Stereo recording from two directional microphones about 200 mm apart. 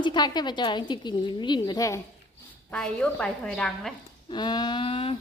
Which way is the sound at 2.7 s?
5° left (ahead or behind).